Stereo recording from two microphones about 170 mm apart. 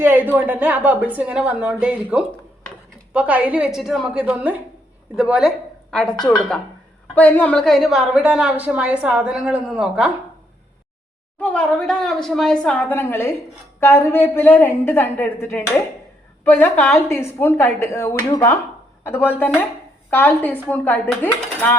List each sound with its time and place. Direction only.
0.0 s a woman's voice: 10° right (ahead or behind)
11.3 s a woman's voice: 10° left (ahead or behind)